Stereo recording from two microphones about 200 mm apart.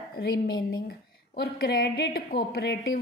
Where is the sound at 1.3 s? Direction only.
50° left (ahead or behind).